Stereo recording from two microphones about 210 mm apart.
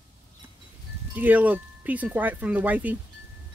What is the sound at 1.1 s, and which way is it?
Speech, 10° right (ahead or behind).